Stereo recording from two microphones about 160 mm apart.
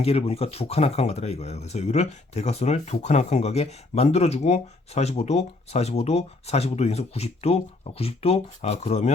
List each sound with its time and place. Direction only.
0.0 s speech: 40° left (ahead or behind)